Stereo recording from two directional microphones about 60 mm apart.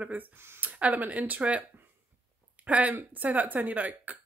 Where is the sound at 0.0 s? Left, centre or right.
Right.